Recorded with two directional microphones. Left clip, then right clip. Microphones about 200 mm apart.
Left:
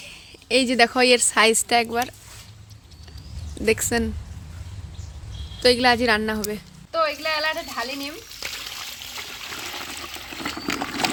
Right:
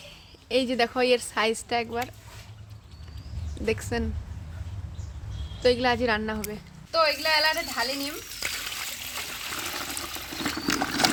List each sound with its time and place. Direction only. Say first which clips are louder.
0.1 s a woman's voice: left 5 dB; 30° left (ahead or behind)
3.7 s speech: left 7 dB; 30° left (ahead or behind)
5.6 s a woman's voice: left 5 dB; 30° left (ahead or behind)
6.9 s frying: even; 5° left (ahead or behind)